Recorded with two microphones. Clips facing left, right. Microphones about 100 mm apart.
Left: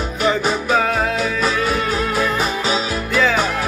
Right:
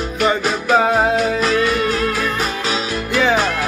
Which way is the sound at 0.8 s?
25° right (ahead or behind).